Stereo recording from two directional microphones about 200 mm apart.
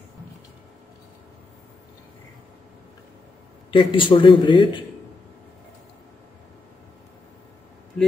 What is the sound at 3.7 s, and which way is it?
A man's voice, 25° left (ahead or behind).